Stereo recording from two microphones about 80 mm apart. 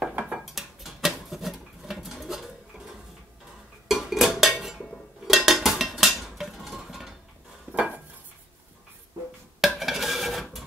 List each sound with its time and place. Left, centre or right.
0.1 s dishes: centre
0.4 s a sound: centre
3.9 s dishes: centre
7.7 s dishes: right
9.6 s stir: centre